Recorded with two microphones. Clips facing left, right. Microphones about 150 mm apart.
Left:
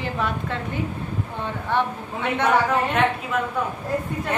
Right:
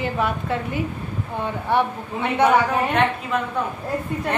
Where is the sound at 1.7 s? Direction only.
10° right (ahead or behind).